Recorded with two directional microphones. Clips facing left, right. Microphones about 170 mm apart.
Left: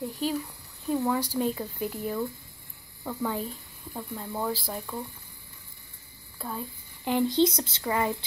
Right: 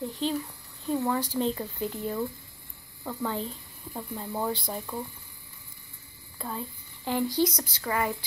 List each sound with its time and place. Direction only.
0.0 s speech: 10° left (ahead or behind)
3.0 s a sound: centre (ahead or behind)
3.3 s speech: 10° left (ahead or behind)
3.9 s speech: 5° right (ahead or behind)
6.3 s speech: centre (ahead or behind)
7.1 s speech: 20° left (ahead or behind)